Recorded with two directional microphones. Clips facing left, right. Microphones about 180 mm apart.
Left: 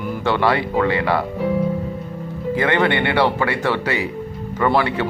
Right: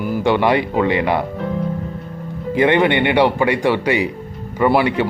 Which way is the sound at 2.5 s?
20° right (ahead or behind).